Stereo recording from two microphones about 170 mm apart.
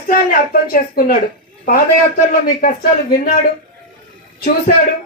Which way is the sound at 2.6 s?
55° left (ahead or behind).